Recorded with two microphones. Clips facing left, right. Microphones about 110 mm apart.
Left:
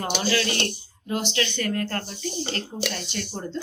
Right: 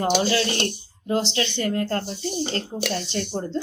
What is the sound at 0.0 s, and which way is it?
Speech, 25° right (ahead or behind).